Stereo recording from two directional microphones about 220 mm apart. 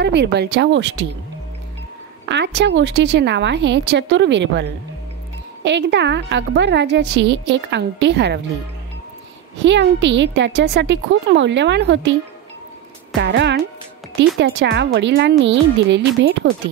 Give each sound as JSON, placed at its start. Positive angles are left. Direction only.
{"t": 0.0, "sound": "a woman's voice", "side_deg": -50}
{"t": 2.2, "sound": "a woman's voice", "side_deg": -50}
{"t": 9.6, "sound": "a woman's voice", "side_deg": -55}
{"t": 13.2, "sound": "a woman's voice", "side_deg": -50}